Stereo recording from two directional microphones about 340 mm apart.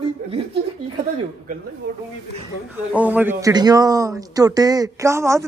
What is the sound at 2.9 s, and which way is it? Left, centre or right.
Speech, centre.